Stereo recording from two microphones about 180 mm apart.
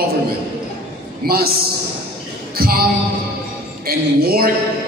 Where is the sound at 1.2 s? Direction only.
60° right (ahead or behind).